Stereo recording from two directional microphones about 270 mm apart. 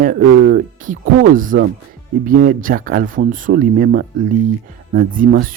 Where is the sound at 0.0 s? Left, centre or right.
Right.